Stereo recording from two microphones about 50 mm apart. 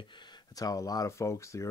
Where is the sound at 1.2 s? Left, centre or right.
Left.